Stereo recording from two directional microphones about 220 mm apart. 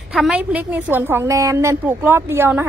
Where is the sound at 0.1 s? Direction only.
5° right (ahead or behind).